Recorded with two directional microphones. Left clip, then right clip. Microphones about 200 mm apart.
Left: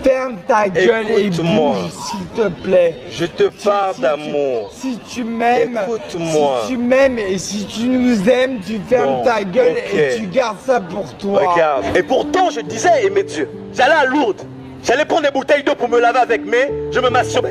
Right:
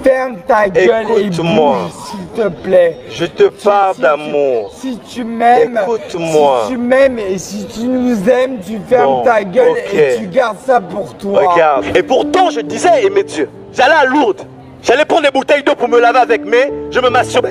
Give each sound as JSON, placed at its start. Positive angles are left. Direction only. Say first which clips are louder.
{"t": 0.0, "sound": "a man's voice", "louder": "right 4 dB", "side_deg": -10}
{"t": 1.3, "sound": "speech", "louder": "right 4 dB", "side_deg": -35}
{"t": 2.3, "sound": "speech", "louder": "right 4 dB", "side_deg": -10}
{"t": 3.2, "sound": "speech", "louder": "right 6 dB", "side_deg": -35}
{"t": 6.7, "sound": "a man's voice", "louder": "right 3 dB", "side_deg": -10}
{"t": 9.8, "sound": "speech", "louder": "right 5 dB", "side_deg": -35}
{"t": 10.3, "sound": "speech", "louder": "right 4 dB", "side_deg": -10}
{"t": 11.3, "sound": "speech", "louder": "right 4 dB", "side_deg": -35}